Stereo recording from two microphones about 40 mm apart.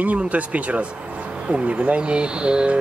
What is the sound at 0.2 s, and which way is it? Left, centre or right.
Speech, right.